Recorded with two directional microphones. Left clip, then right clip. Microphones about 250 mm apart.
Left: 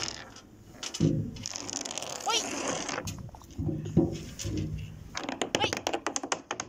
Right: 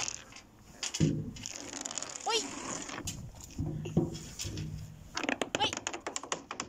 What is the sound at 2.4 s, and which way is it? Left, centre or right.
Mechanisms, left.